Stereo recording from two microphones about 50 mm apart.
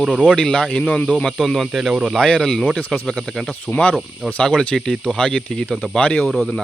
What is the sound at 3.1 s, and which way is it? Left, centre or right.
Speech, centre.